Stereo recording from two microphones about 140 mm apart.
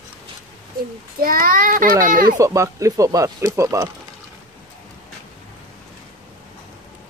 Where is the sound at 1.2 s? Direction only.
90° right.